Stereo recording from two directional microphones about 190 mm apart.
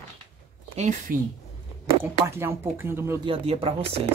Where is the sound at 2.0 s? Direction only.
15° right (ahead or behind).